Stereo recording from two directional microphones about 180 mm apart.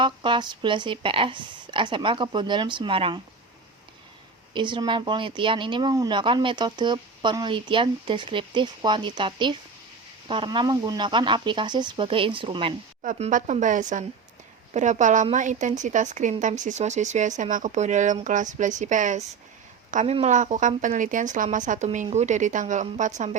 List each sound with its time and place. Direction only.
0.0 s speech: 25° right (ahead or behind)
4.5 s speech: 25° right (ahead or behind)
13.0 s a woman's voice: 40° right (ahead or behind)